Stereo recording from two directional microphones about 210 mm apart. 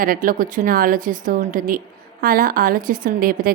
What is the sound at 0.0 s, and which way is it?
A woman's voice, 40° right (ahead or behind).